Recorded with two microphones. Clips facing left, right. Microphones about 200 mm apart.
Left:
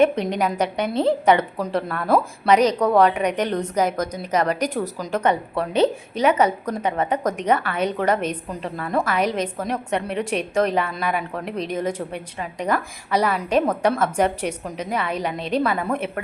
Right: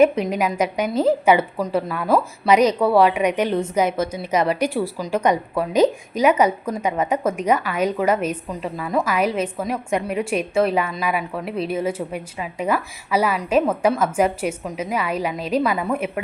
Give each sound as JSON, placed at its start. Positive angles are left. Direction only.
{"t": 0.0, "sound": "a woman's voice", "side_deg": -10}